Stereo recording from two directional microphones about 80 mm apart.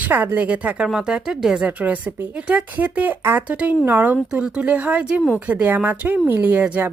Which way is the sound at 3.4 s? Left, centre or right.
Centre.